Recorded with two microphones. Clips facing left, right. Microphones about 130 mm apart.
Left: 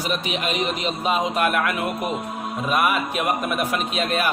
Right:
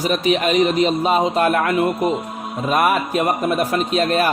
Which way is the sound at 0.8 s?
35° right (ahead or behind).